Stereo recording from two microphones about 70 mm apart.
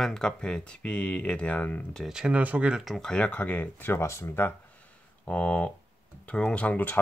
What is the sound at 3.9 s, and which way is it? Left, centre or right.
Speech, left.